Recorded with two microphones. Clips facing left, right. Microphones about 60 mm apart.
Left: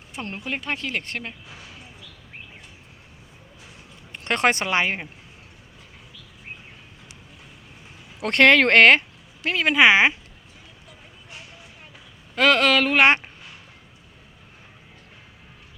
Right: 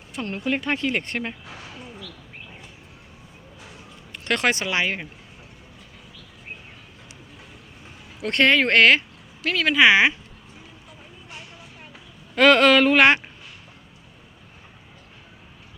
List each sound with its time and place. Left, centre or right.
0.1 s speech: left
0.3 s speech: centre
4.1 s speech: left
8.2 s speech: left
8.7 s speech: left
9.4 s speech: left
12.4 s speech: centre